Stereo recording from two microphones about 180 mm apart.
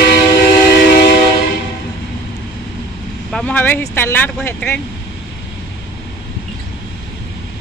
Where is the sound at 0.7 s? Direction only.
65° left (ahead or behind).